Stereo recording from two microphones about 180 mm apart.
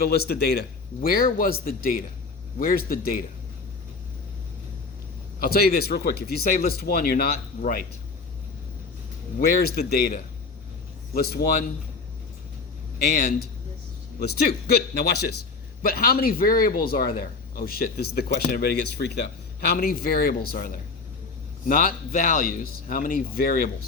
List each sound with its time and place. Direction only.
0.0 s speech: 60° left (ahead or behind)
5.4 s speech: 60° left (ahead or behind)
9.5 s speech: 60° left (ahead or behind)
13.0 s speech: 55° left (ahead or behind)